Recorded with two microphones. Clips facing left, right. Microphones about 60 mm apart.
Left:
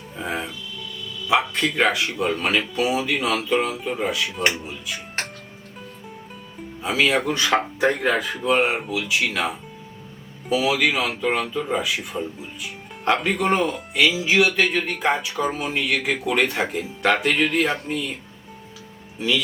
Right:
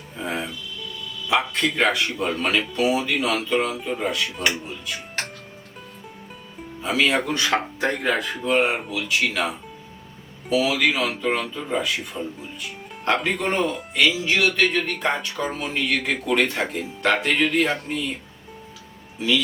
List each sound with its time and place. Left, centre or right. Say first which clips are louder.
0.2 s speech: even; centre
6.8 s speech: left 1 dB; centre
12.1 s speech: left 2 dB; centre
12.6 s speech: left 2 dB; centre